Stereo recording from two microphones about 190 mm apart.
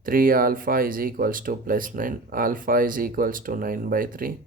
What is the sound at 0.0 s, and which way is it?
Speech, 45° right (ahead or behind).